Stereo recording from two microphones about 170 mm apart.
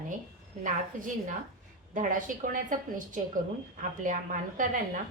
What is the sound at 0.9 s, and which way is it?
A woman's voice, 50° right (ahead or behind).